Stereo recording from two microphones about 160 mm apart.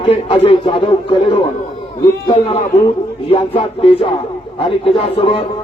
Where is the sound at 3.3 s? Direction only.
35° left (ahead or behind).